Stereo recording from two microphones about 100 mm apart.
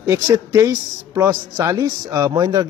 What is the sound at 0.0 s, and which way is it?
Speech, 30° right (ahead or behind).